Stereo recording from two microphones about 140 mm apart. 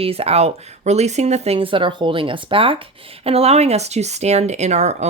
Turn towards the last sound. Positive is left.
turn(degrees=-55)  # may be behind; listen again after turning